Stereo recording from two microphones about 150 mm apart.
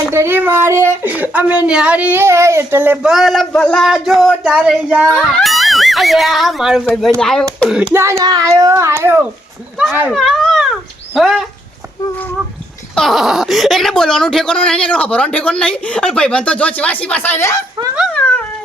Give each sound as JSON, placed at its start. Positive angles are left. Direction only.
{"t": 0.1, "sound": "speech", "side_deg": -15}
{"t": 7.9, "sound": "a child's voice", "side_deg": -20}
{"t": 10.1, "sound": "speech", "side_deg": 0}
{"t": 13.0, "sound": "speech", "side_deg": 0}